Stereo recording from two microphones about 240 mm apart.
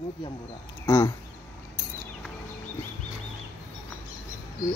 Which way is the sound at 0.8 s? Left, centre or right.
Centre.